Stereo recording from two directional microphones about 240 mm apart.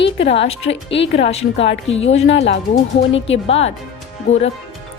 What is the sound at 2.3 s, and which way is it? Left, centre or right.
Speech, left.